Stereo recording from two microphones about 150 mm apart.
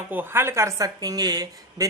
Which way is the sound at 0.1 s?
15° right (ahead or behind).